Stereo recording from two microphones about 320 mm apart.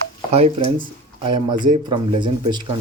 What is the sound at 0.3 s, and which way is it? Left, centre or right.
Speech, centre.